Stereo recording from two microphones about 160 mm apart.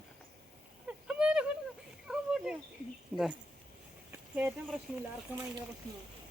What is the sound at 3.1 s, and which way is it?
Speech, 10° right (ahead or behind).